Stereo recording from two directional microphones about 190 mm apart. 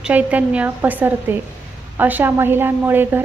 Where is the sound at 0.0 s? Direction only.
10° right (ahead or behind).